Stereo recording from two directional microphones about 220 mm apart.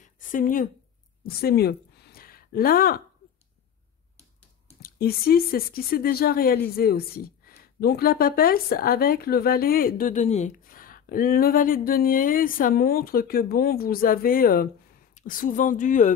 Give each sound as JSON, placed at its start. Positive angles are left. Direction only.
{"t": 0.0, "sound": "a woman's voice", "side_deg": 35}
{"t": 1.2, "sound": "a sound", "side_deg": 45}
{"t": 4.8, "sound": "speech", "side_deg": 45}